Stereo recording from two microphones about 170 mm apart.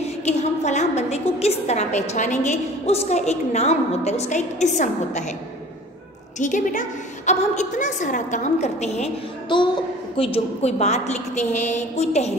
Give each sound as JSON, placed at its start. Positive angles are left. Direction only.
{"t": 0.0, "sound": "a woman's voice", "side_deg": 40}
{"t": 6.4, "sound": "a woman's voice", "side_deg": 50}
{"t": 9.5, "sound": "a child's voice", "side_deg": 30}